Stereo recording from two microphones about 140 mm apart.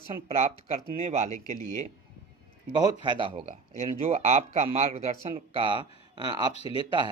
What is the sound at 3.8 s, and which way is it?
Speech, 50° right (ahead or behind).